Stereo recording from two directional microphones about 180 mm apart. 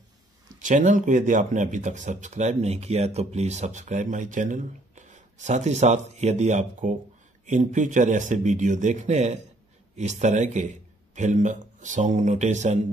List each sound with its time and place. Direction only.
0.6 s speech: 45° right (ahead or behind)